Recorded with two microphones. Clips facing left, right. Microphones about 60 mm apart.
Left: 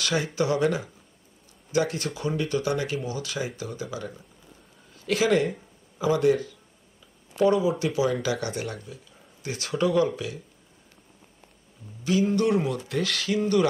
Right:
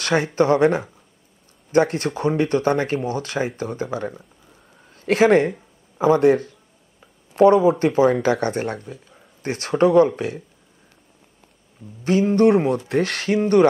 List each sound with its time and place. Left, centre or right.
0.0 s a man's voice: right
6.2 s speech: right
12.0 s speech: right